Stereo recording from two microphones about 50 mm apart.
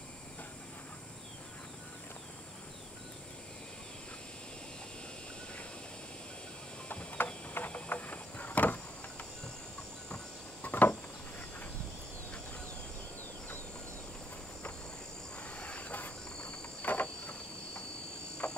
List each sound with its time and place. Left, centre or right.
7.2 s a sound: left
7.5 s vehicle: left
10.6 s a sound: left
15.5 s cricket: left
16.8 s insect: left
18.4 s frog: left